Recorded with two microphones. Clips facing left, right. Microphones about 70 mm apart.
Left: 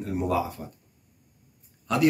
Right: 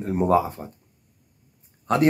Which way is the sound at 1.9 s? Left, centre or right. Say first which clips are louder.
Right 5 dB; right.